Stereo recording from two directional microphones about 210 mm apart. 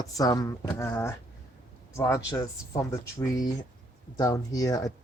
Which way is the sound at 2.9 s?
15° left (ahead or behind).